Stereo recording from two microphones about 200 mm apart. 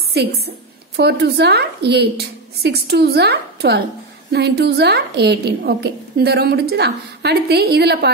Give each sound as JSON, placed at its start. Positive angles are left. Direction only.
{"t": 0.2, "sound": "a woman's voice", "side_deg": -55}